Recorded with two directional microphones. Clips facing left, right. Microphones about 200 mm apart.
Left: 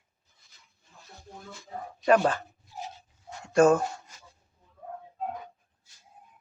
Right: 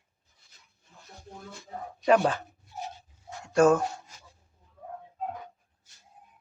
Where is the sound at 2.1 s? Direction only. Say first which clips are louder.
Even; 15° right (ahead or behind).